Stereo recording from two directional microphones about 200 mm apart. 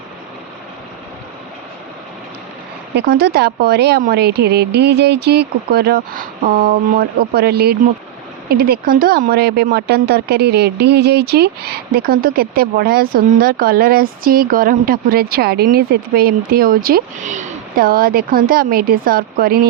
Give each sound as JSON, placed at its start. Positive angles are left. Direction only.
{"t": 2.9, "sound": "speech", "side_deg": -55}